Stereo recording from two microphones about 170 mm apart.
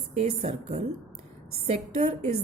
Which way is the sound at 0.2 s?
45° right (ahead or behind).